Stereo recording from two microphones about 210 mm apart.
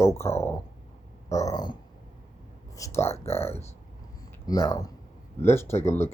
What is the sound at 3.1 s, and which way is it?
Speech, 30° left (ahead or behind).